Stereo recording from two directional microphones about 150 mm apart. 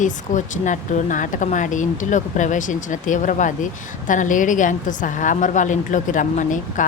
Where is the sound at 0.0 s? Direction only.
55° left (ahead or behind).